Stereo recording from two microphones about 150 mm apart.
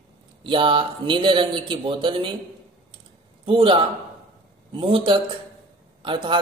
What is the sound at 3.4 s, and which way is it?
A man's voice, 35° right (ahead or behind).